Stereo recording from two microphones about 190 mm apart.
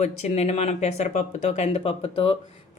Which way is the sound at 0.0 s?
35° left (ahead or behind).